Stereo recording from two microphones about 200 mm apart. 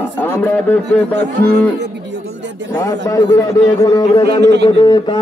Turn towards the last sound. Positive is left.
turn(degrees=20)  # may be behind; listen again after turning